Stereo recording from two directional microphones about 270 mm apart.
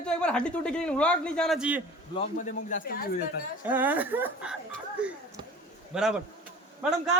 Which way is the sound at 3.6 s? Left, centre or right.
Centre.